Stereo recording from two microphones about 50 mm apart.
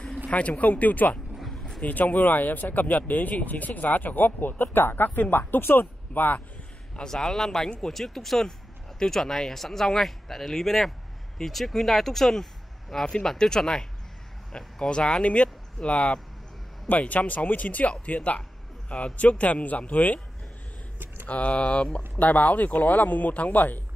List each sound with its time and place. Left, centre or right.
0.3 s speech: left
1.4 s a sound: centre
1.8 s speech: left
7.0 s speech: centre; by 20.2 s left
21.3 s speech: left
22.2 s speech: left